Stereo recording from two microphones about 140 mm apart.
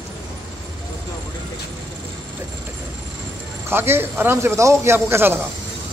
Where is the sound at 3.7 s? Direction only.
15° right (ahead or behind).